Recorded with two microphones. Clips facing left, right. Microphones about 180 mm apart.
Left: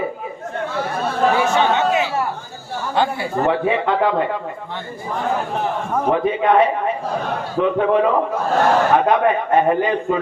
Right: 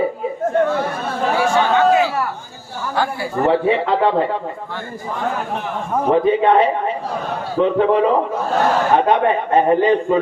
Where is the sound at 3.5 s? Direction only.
30° right (ahead or behind).